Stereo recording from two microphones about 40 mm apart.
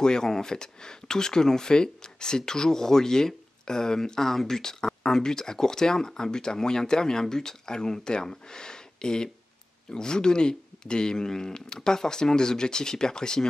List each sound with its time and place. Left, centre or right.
0.0 s speech: centre